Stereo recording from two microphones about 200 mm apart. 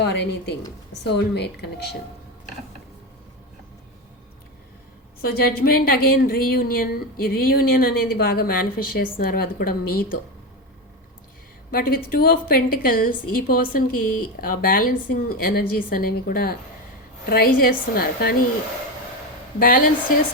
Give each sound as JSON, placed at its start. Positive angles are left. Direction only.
{"t": 0.0, "sound": "a woman's voice", "side_deg": 55}
{"t": 5.2, "sound": "a woman's voice", "side_deg": 50}
{"t": 11.7, "sound": "a woman's voice", "side_deg": 45}
{"t": 19.5, "sound": "a woman's voice", "side_deg": 45}